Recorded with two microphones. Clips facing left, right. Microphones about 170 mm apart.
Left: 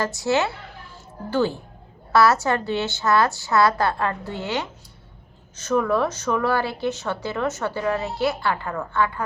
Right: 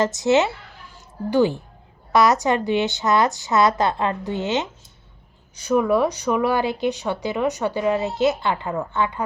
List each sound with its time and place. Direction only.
0.0 s a woman's voice: 20° right (ahead or behind)